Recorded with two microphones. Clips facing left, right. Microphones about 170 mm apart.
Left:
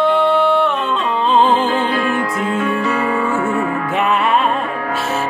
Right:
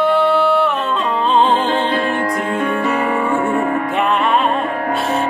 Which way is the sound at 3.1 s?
20° right (ahead or behind).